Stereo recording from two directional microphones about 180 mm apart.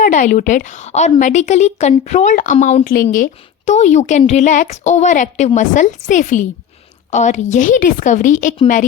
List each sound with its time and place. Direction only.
0.0 s a woman's voice: 45° left (ahead or behind)